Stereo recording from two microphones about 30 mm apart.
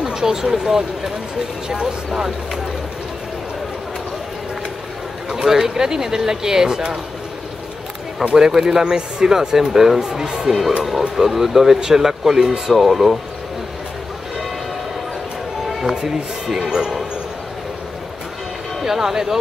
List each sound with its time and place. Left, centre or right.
0.0 s speech: centre
5.3 s speech: centre
8.2 s speech: centre
10.8 s speech: centre
12.7 s speech: centre
15.9 s speech: right
18.9 s speech: centre